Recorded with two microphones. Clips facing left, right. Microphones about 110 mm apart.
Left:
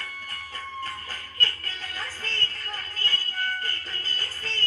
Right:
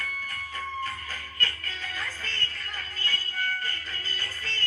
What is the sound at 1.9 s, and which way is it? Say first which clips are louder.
Music: left 2 dB; 35° left (ahead or behind).